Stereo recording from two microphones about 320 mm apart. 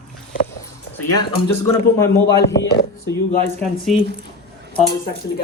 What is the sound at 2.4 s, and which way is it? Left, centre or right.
Speech, left.